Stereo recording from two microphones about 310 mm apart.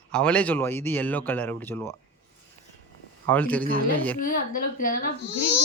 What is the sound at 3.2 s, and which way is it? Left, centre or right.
Speech, centre.